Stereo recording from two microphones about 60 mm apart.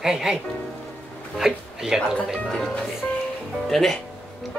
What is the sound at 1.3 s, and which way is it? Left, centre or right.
Speech, centre.